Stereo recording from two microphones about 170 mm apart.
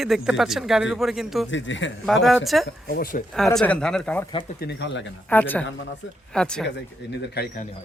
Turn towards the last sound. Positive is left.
turn(degrees=65)  # may be behind; listen again after turning